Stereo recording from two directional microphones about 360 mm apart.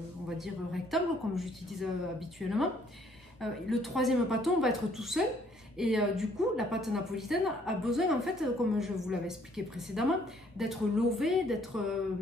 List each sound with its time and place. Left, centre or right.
0.4 s a woman's voice: centre